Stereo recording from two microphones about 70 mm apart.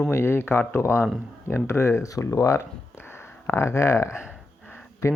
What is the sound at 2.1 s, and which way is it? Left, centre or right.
Speech, left.